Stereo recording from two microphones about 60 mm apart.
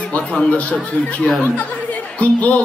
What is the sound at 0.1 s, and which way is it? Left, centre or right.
Speech, left.